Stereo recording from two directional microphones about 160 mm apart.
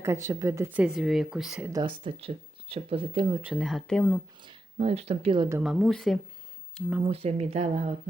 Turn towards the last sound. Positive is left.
turn(degrees=-40)  # may be behind; listen again after turning